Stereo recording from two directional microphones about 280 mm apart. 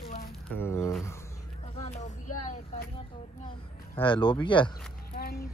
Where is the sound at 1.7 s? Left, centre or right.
Left.